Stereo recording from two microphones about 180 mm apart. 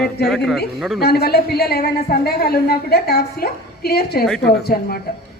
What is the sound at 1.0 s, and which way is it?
A woman's voice, 60° left (ahead or behind).